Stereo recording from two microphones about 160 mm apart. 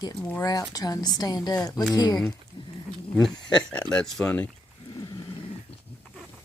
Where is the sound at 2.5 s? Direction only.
30° left (ahead or behind).